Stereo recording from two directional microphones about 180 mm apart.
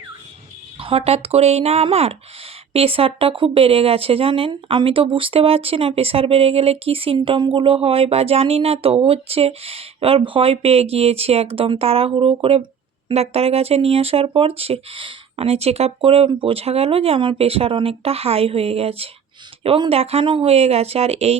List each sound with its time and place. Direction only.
0.8 s speech: 30° right (ahead or behind)